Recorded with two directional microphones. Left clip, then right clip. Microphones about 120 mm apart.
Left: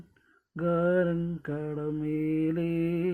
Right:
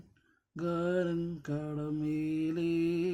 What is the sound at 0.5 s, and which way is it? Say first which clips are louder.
Mantra: left 6 dB; 25° left (ahead or behind).